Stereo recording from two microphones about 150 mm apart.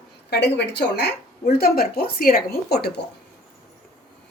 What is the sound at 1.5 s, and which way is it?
Speech, 85° left.